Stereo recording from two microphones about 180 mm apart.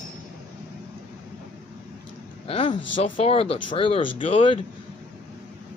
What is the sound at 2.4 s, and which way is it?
Speech, 30° left (ahead or behind).